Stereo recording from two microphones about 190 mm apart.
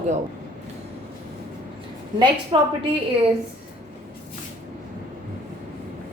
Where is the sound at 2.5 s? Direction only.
25° right (ahead or behind).